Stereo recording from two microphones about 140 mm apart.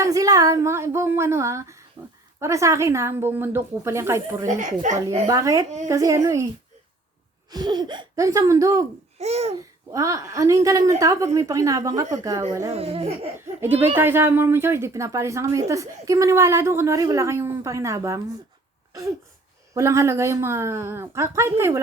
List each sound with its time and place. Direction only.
0.0 s a woman's voice: 25° right (ahead or behind)
4.4 s speech: 60° right (ahead or behind)
5.3 s a woman's voice: 25° right (ahead or behind)
7.5 s a woman's voice: 30° right (ahead or behind)
9.1 s babbling: 50° right (ahead or behind)
9.9 s a woman's voice: 25° right (ahead or behind)
12.7 s speech: 45° right (ahead or behind)
13.9 s a woman's voice: 15° right (ahead or behind)
19.7 s a woman's voice: 20° right (ahead or behind)